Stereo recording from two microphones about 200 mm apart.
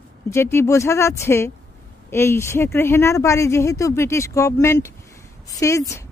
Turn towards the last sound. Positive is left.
turn(degrees=15)  # may be behind; listen again after turning